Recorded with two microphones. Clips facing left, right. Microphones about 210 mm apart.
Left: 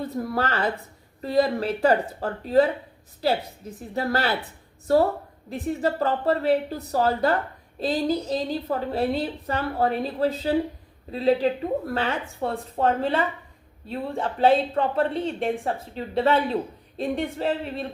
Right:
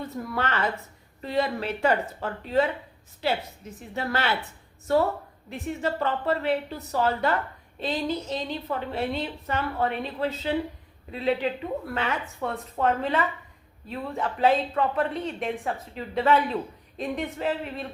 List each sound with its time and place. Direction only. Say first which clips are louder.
0.0 s a woman's voice: left 4 dB; 35° left (ahead or behind)